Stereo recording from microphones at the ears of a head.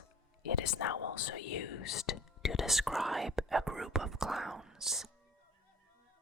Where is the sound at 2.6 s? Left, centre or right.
Centre.